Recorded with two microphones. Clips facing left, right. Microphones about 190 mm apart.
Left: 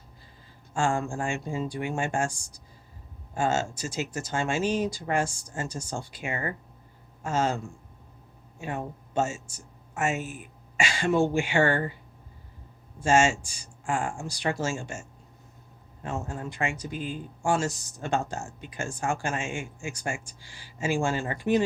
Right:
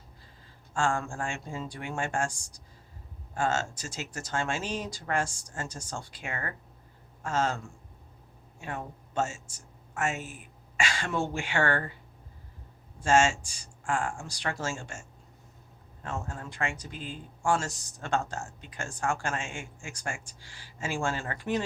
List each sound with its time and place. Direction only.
0.7 s speech: 15° left (ahead or behind)
3.3 s speech: 10° left (ahead or behind)
8.6 s speech: 15° left (ahead or behind)
13.1 s speech: 10° left (ahead or behind)
16.0 s speech: 15° left (ahead or behind)